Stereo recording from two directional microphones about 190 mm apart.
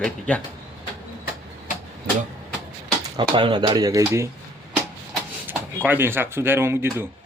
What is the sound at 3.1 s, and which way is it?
Speech, 25° right (ahead or behind).